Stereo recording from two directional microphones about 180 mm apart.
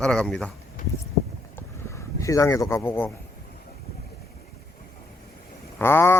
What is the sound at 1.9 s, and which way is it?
Speech, 15° left (ahead or behind).